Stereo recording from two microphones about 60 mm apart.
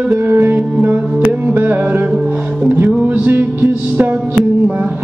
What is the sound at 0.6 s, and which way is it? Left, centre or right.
Music, right.